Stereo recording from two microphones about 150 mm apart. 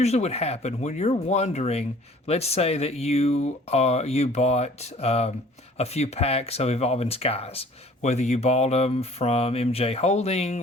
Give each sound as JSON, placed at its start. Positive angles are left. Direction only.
{"t": 0.0, "sound": "speech", "side_deg": 45}